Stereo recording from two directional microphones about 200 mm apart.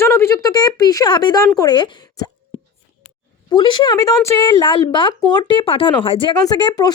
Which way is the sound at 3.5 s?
25° left (ahead or behind).